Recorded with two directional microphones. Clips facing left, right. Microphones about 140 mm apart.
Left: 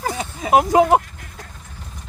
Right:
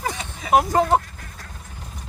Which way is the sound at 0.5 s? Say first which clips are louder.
Left 4 dB; 10° left (ahead or behind).